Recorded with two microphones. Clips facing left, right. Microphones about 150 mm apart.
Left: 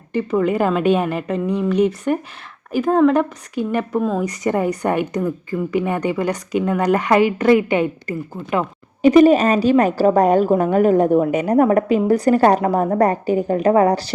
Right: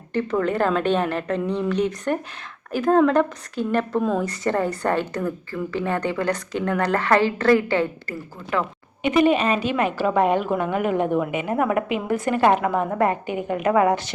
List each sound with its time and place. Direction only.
0.1 s a woman's voice: 10° left (ahead or behind)
9.0 s a woman's voice: 35° left (ahead or behind)